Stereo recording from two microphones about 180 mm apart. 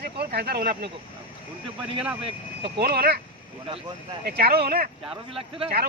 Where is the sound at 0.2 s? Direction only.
60° right (ahead or behind).